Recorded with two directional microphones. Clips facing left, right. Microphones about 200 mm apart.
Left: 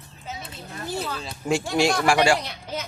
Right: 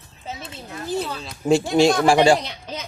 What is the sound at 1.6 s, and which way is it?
Speech, 25° right (ahead or behind).